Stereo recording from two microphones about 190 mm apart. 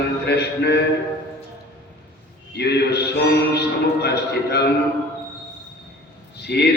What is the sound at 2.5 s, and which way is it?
A man's voice, 60° left (ahead or behind).